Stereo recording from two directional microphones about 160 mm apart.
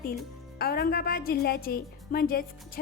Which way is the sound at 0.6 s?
70° left (ahead or behind).